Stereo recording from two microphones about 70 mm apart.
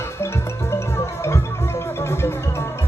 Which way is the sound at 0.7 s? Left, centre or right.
Left.